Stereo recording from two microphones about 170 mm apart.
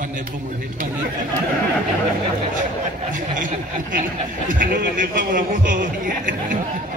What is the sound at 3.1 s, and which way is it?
A man's voice, 50° right (ahead or behind).